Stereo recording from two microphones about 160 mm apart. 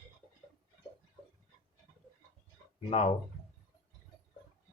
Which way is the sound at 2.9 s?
40° left (ahead or behind).